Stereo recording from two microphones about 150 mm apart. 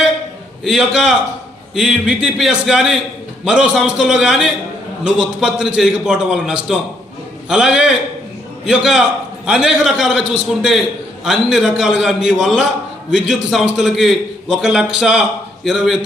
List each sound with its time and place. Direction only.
0.6 s a man's voice: 5° right (ahead or behind)